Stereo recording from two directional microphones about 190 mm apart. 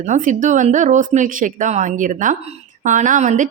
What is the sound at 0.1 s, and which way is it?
A woman's voice, 40° right (ahead or behind).